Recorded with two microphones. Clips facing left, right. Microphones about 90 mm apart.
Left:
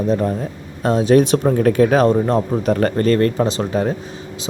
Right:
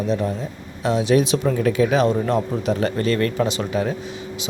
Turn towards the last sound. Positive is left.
turn(degrees=40)  # may be behind; listen again after turning